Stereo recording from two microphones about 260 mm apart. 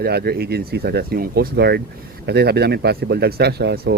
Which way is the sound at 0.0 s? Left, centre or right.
Right.